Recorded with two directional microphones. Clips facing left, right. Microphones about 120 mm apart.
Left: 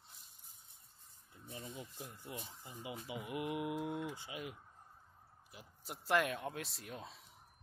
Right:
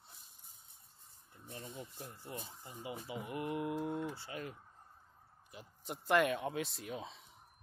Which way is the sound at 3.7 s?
30° right (ahead or behind).